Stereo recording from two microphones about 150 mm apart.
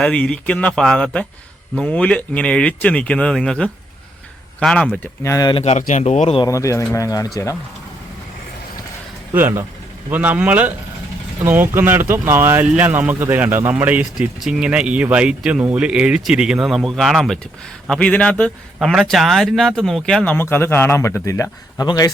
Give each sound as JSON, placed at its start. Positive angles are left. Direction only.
{"t": 0.0, "sound": "a man's voice", "side_deg": 5}
{"t": 5.2, "sound": "speech", "side_deg": 20}
{"t": 5.5, "sound": "speech", "side_deg": 40}
{"t": 5.8, "sound": "speech", "side_deg": 50}
{"t": 6.4, "sound": "speech", "side_deg": 20}
{"t": 9.3, "sound": "a man's voice", "side_deg": -15}